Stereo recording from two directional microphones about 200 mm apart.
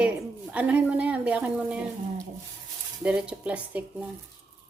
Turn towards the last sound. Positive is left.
turn(degrees=-5)  # may be behind; listen again after turning